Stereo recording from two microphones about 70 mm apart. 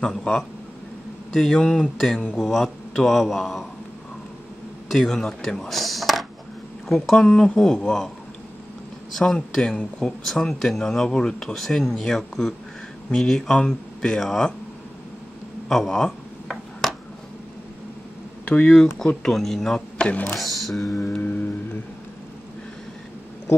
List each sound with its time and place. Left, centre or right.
0.0 s speech: centre
4.9 s speech: centre
9.1 s speech: centre
15.7 s a sound: centre
18.4 s speech: centre
20.1 s speech: left
20.3 s speech: centre
20.8 s music: left